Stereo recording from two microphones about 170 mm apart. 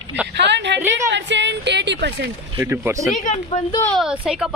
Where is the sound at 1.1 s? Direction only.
90° right.